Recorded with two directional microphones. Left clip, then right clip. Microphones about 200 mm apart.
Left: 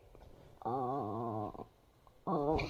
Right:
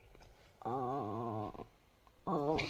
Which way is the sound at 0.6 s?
25° right (ahead or behind).